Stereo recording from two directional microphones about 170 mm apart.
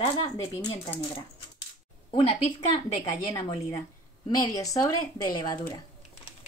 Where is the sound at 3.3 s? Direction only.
30° left (ahead or behind).